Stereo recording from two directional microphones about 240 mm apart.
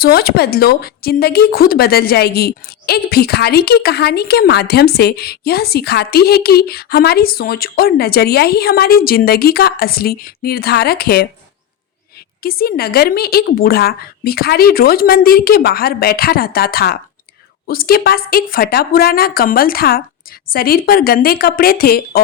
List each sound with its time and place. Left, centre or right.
0.0 s a woman's voice: left
12.4 s a woman's voice: left